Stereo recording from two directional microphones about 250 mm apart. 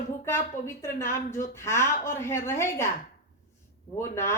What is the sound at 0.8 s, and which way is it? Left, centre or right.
Speech, centre.